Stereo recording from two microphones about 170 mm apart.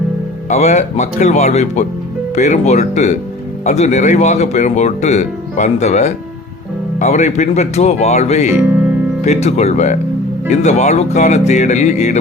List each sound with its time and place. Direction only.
0.5 s speech: 45° left (ahead or behind)
8.5 s music: 10° right (ahead or behind)
9.2 s speech: 40° left (ahead or behind)